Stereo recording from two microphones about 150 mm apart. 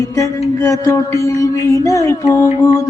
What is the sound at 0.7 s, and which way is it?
Music, 20° left (ahead or behind).